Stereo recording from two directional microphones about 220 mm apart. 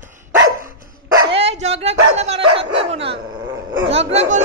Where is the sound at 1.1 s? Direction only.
25° right (ahead or behind).